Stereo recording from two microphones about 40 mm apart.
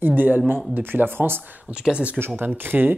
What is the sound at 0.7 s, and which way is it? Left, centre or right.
Speech, right.